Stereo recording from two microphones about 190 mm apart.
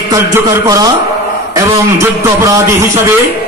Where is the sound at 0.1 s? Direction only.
15° right (ahead or behind).